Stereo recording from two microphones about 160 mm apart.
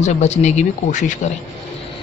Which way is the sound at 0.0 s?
45° left (ahead or behind).